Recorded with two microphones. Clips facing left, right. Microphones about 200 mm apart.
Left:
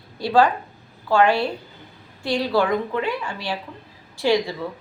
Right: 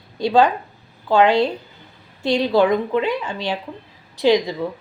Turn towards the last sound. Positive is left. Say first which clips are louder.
# right 4 dB
turn(degrees=-20)  # may be behind; listen again after turning